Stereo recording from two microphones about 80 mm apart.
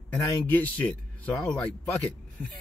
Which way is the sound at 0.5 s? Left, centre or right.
Left.